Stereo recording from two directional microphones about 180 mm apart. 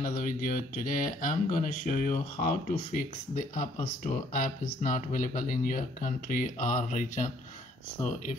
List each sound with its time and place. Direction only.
0.0 s speech: 50° left (ahead or behind)